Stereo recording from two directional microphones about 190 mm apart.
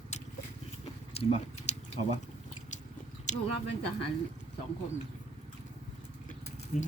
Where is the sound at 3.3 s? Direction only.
40° left (ahead or behind).